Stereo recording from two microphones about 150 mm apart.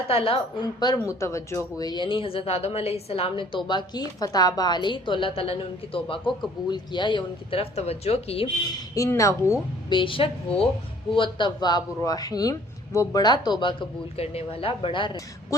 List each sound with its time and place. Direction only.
0.1 s a woman's voice: 40° left (ahead or behind)
9.0 s speech: 20° left (ahead or behind)
9.9 s a woman's voice: 35° left (ahead or behind)